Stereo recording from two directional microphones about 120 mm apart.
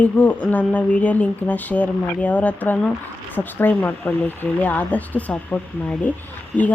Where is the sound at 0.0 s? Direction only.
10° left (ahead or behind).